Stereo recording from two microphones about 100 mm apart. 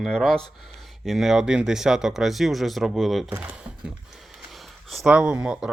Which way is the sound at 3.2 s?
15° right (ahead or behind).